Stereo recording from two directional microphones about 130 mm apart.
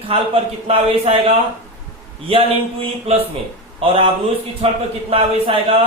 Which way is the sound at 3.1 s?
50° right (ahead or behind).